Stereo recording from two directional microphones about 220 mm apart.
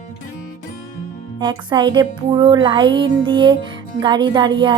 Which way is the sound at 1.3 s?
20° right (ahead or behind).